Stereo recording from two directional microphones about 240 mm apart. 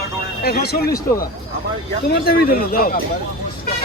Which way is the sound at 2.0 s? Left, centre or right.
Left.